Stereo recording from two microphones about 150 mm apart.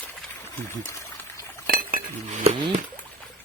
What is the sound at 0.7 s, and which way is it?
Speech, 15° left (ahead or behind).